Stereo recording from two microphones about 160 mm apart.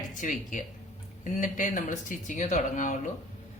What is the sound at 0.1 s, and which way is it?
A woman's voice, 55° left (ahead or behind).